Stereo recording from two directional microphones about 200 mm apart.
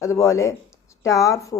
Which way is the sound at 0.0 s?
15° left (ahead or behind).